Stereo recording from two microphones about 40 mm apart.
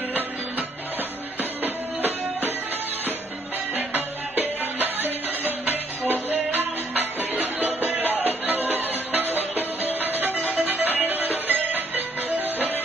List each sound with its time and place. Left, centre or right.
1.4 s music: right
3.7 s music: right